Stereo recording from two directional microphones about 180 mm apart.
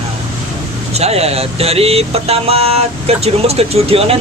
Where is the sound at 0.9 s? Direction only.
35° right (ahead or behind).